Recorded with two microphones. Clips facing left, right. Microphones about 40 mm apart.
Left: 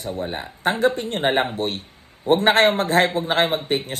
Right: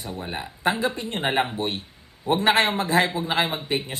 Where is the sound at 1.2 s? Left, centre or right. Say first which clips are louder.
Left 3 dB; left.